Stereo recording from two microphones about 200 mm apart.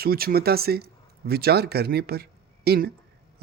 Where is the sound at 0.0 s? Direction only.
50° right (ahead or behind).